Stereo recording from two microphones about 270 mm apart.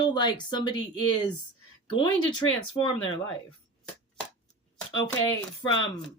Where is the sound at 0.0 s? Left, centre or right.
Centre.